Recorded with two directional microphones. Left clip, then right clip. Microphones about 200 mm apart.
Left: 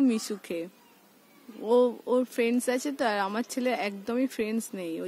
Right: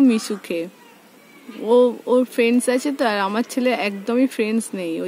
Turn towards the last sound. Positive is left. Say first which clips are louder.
# right 9 dB
turn(degrees=10)  # may be behind; listen again after turning